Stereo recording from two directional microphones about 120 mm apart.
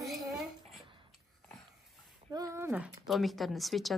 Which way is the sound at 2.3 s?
25° right (ahead or behind).